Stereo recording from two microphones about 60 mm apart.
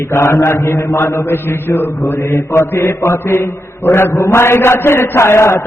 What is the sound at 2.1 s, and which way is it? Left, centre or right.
Speech, left.